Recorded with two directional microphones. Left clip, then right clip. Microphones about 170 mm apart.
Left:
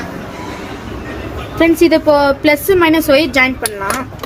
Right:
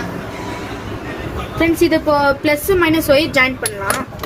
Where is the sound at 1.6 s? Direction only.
70° left (ahead or behind); by 3.5 s 35° left (ahead or behind).